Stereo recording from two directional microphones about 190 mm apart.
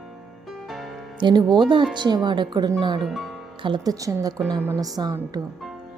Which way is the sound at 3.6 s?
20° right (ahead or behind).